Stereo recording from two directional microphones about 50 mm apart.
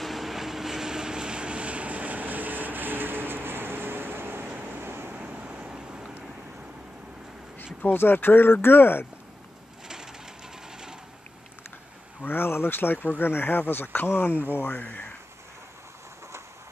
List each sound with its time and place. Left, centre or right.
0.0 s vehicle: centre; by 4.5 s right
4.5 s vehicle: right
4.7 s vehicle: right
5.1 s vehicle: right
7.8 s speech: left
12.2 s speech: left